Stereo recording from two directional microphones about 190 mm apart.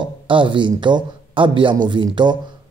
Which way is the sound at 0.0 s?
25° right (ahead or behind).